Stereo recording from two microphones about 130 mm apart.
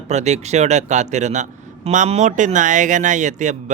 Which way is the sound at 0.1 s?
60° right (ahead or behind).